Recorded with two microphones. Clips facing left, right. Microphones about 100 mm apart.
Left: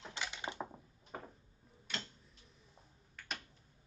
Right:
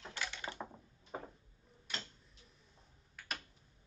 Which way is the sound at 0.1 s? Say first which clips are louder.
Left 1 dB; 20° left (ahead or behind).